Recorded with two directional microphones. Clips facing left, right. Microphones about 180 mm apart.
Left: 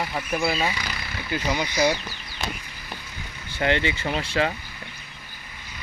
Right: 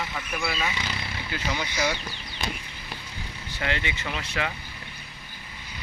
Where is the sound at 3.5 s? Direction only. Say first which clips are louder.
Left 7 dB; 30° left (ahead or behind).